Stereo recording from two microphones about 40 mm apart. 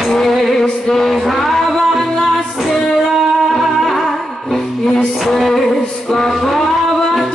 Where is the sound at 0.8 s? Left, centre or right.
Centre.